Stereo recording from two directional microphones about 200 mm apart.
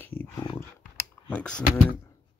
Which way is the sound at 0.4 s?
20° left (ahead or behind).